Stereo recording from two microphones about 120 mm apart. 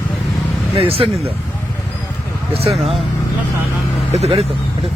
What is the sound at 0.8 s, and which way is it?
Speech, 50° right (ahead or behind).